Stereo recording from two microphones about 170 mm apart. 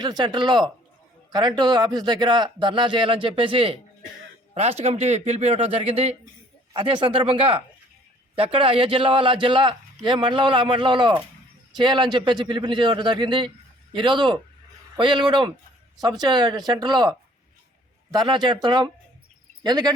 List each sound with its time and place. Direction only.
0.0 s a man's voice: 25° right (ahead or behind)